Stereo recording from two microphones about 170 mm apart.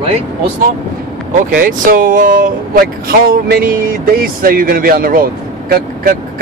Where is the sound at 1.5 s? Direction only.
55° right (ahead or behind).